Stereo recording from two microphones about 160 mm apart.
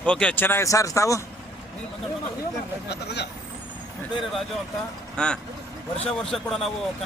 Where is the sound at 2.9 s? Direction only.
90° left.